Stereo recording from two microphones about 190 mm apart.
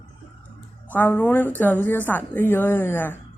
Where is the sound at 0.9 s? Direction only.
10° left (ahead or behind).